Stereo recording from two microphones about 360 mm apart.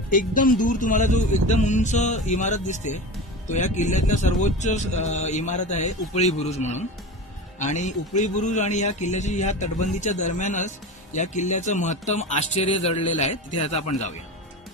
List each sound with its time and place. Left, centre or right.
0.1 s a man's voice: left